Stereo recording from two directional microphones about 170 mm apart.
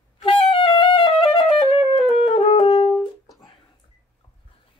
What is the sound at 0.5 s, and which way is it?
Music, 30° left (ahead or behind).